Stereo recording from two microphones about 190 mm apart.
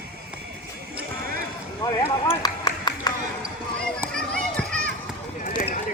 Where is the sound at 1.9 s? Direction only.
20° left (ahead or behind).